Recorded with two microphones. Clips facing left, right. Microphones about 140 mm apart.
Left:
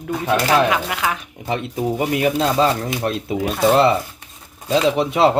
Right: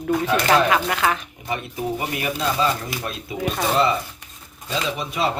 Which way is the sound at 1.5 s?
90° left.